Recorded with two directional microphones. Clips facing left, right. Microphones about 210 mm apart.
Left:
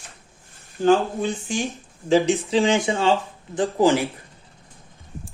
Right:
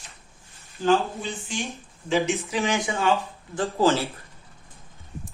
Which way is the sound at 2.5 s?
30° left (ahead or behind).